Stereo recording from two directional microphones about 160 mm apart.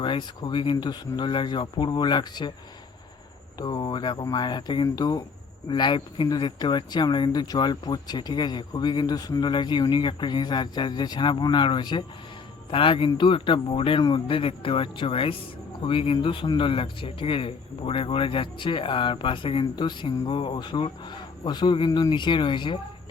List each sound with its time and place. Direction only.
0.0 s speech: 30° left (ahead or behind)
3.6 s speech: 25° left (ahead or behind)